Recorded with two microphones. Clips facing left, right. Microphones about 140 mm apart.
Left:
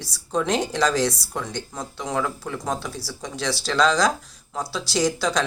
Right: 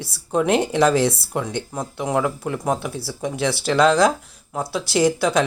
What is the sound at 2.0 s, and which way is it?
Speech, 15° right (ahead or behind).